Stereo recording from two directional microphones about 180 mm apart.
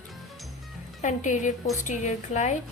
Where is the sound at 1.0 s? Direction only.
45° left (ahead or behind).